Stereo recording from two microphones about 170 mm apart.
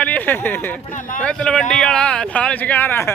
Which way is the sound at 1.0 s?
50° left (ahead or behind).